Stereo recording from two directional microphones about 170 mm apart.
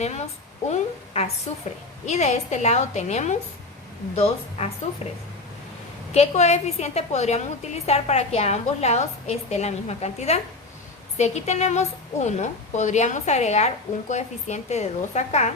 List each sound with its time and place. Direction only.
0.0 s a woman's voice: 40° left (ahead or behind)
6.1 s a woman's voice: 40° left (ahead or behind)